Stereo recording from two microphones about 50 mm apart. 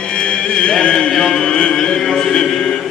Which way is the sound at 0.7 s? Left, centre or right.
Centre.